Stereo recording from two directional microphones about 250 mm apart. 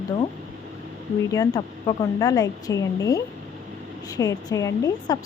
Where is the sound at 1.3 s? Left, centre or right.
Centre.